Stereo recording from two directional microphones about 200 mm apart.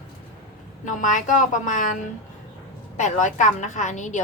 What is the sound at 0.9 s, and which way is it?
A woman's voice, 40° left (ahead or behind).